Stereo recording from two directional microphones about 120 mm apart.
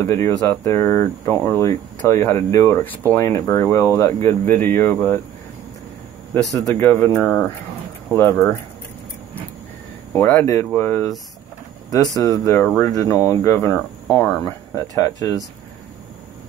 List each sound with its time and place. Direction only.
0.0 s speech: 25° left (ahead or behind)
6.3 s speech: 20° left (ahead or behind)
10.1 s speech: 25° left (ahead or behind)
10.7 s speech: 15° left (ahead or behind)
12.2 s speech: 30° left (ahead or behind)
12.6 s speech: 5° left (ahead or behind)
12.9 s speech: 25° left (ahead or behind)